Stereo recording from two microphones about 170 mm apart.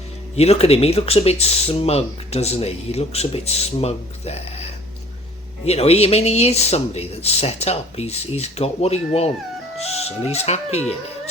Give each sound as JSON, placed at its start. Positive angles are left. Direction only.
{"t": 0.3, "sound": "speech", "side_deg": 40}